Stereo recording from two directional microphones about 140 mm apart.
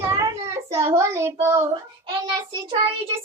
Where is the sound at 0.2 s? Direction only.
20° right (ahead or behind).